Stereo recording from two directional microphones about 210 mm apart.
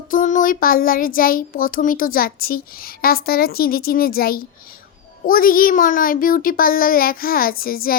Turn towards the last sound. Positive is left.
turn(degrees=45)  # may be behind; listen again after turning